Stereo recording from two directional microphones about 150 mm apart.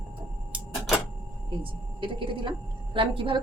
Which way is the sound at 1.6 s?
35° right (ahead or behind).